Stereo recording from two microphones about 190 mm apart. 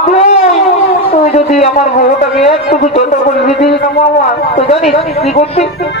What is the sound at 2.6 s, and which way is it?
Speech, 40° left (ahead or behind).